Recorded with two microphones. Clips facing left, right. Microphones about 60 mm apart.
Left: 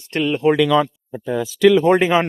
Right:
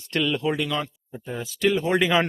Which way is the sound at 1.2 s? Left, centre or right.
Left.